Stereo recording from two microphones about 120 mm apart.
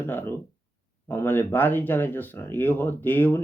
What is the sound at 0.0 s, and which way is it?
Speech, 20° left (ahead or behind).